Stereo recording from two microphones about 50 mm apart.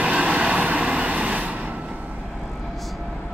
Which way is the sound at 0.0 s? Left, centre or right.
Right.